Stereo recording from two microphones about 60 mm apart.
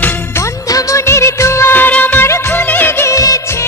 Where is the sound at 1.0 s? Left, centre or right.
Left.